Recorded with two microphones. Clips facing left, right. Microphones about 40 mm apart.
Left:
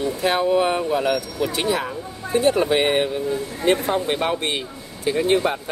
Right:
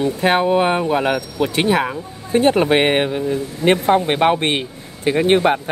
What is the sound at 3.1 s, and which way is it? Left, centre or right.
Speech, right.